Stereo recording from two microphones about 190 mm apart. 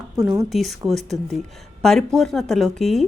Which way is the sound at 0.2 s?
20° right (ahead or behind).